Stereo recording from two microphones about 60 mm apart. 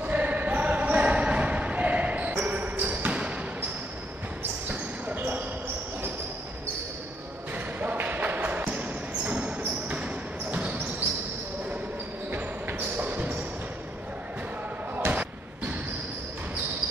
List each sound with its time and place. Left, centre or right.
0.0 s basketball bounce: right
4.6 s basketball bounce: right
7.5 s basketball bounce: right
12.3 s basketball bounce: right
15.0 s slam: right